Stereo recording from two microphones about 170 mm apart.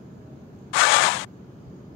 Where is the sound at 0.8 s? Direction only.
90° left.